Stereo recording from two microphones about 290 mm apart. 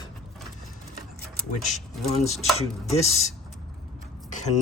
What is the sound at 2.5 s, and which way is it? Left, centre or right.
Chopping, left.